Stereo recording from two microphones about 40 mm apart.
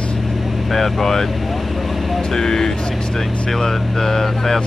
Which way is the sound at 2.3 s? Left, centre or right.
Centre.